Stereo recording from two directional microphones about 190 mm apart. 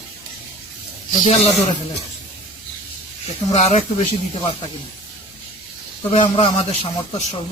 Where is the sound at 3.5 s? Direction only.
35° left (ahead or behind).